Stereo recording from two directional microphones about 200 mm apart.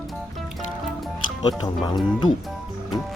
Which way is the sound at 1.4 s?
20° left (ahead or behind).